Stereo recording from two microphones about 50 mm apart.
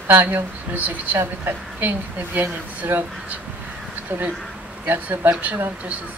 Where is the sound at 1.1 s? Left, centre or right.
Right.